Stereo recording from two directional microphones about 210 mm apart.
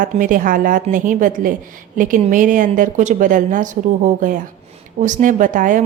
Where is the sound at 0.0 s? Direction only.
40° right (ahead or behind).